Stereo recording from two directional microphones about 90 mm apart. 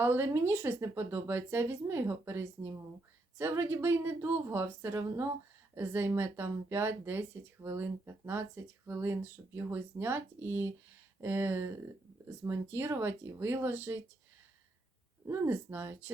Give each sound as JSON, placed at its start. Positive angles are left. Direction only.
{"t": 0.0, "sound": "speech", "side_deg": -25}
{"t": 15.3, "sound": "speech", "side_deg": -25}